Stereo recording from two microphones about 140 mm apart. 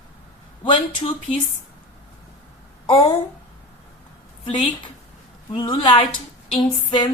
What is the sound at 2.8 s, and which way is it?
Speech, 40° left (ahead or behind).